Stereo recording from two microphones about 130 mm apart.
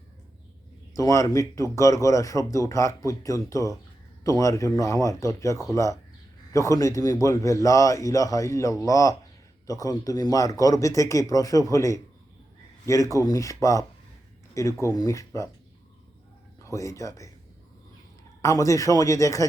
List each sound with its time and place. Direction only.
0.9 s speech: 25° left (ahead or behind)
16.6 s speech: 25° left (ahead or behind)
18.4 s speech: 25° left (ahead or behind)